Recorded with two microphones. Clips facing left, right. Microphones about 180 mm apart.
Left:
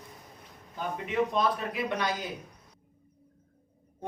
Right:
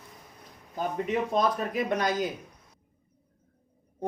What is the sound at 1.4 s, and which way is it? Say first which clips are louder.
Speech: right 2 dB; 45° right (ahead or behind).